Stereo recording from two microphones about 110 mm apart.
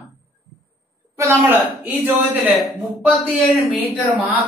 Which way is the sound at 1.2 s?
20° right (ahead or behind).